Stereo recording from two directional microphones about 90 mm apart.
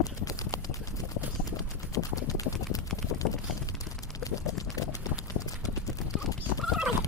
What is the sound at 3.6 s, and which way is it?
Clip-clop, 40° left (ahead or behind).